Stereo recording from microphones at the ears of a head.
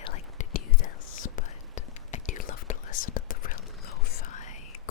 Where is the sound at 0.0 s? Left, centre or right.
Left.